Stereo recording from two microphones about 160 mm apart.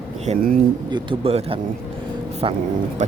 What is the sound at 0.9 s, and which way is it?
Speech, 35° right (ahead or behind).